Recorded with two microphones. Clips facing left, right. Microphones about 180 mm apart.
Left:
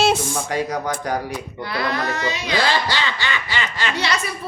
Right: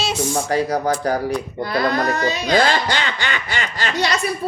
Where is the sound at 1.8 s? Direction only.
40° right (ahead or behind).